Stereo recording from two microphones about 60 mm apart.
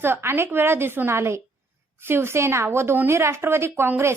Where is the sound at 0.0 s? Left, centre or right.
Right.